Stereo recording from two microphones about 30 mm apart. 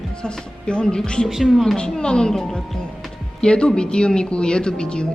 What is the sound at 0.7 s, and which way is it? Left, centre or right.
Speech, left.